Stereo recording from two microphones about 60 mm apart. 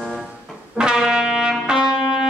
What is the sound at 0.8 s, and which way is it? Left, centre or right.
Trumpet, centre.